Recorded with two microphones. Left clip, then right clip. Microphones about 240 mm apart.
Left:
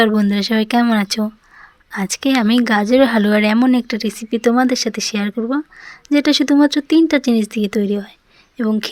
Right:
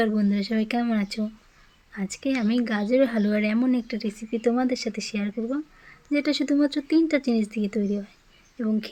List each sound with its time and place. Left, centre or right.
0.0 s a woman's voice: left